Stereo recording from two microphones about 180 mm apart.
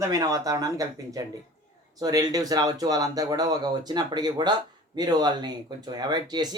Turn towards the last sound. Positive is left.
turn(degrees=-25)  # may be behind; listen again after turning